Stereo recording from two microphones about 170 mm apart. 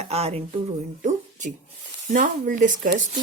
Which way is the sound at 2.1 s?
50° right (ahead or behind).